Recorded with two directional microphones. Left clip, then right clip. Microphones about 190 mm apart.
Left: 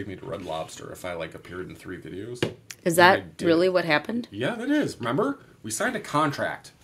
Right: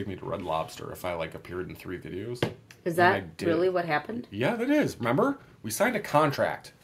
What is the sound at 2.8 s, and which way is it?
Speech, 65° left (ahead or behind).